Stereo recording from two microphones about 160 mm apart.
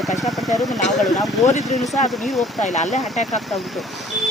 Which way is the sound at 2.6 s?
50° left (ahead or behind).